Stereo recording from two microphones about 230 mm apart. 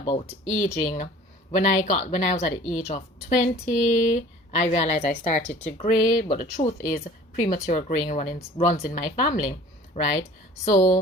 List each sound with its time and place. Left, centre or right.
0.0 s speech: centre
0.4 s speech: left
5.7 s a woman's voice: left